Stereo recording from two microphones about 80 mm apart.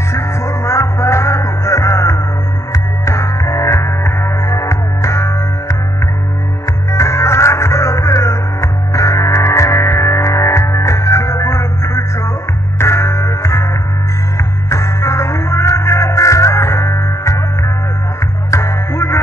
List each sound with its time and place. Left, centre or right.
0.1 s music: left
18.5 s music: left